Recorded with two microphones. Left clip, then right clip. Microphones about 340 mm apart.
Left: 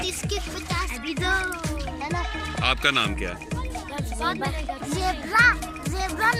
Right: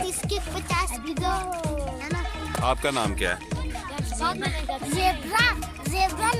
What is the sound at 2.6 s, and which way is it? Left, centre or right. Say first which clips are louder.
Speech: left 3 dB; right.